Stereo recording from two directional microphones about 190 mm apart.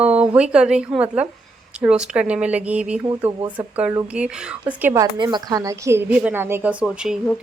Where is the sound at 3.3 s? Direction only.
25° right (ahead or behind).